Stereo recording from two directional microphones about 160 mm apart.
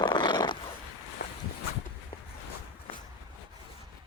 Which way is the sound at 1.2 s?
80° left.